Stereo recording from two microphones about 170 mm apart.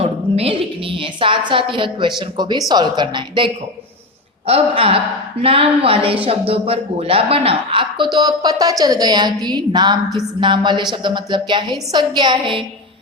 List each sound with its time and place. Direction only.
0.0 s a woman's voice: 35° right (ahead or behind)